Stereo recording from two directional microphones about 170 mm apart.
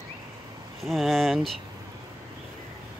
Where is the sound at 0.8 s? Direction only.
Centre (ahead or behind).